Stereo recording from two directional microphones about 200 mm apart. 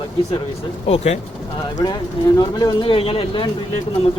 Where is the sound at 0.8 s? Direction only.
35° left (ahead or behind).